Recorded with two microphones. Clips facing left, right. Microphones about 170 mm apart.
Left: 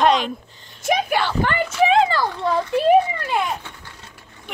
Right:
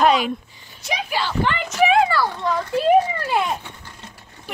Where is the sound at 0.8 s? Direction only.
55° left (ahead or behind).